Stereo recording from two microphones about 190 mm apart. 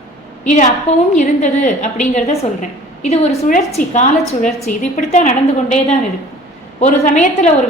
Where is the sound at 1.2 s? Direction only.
40° left (ahead or behind).